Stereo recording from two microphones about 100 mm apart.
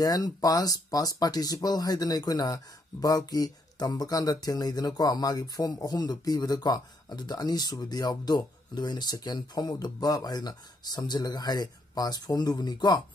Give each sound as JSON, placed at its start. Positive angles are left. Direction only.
{"t": 0.0, "sound": "speech", "side_deg": 40}